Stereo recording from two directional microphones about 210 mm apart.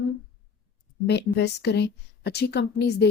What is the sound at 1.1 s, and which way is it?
A woman's voice, 50° left (ahead or behind).